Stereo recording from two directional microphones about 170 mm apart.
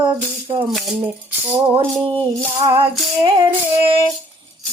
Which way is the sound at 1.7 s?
30° right (ahead or behind).